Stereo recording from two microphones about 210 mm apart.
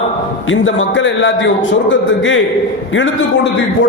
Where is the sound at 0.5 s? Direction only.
65° left (ahead or behind).